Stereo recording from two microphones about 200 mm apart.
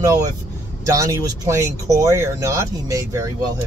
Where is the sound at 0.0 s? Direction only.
20° right (ahead or behind).